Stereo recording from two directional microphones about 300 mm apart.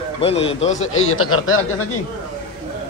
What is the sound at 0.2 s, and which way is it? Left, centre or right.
Speech, centre.